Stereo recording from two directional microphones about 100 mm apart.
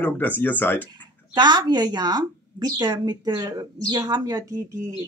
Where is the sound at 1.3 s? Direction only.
45° right (ahead or behind).